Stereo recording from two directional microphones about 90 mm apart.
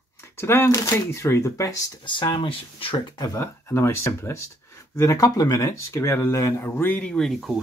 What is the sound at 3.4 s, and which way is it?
Speech, 30° left (ahead or behind).